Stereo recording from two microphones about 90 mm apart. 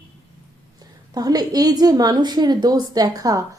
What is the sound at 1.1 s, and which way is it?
Speech, 45° right (ahead or behind).